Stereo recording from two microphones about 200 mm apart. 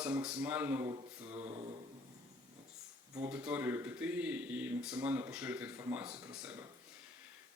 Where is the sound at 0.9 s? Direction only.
30° right (ahead or behind).